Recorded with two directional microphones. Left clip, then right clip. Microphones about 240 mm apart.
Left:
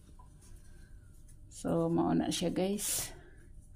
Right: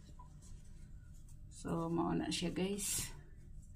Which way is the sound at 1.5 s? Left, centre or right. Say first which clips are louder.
Left 8 dB; left.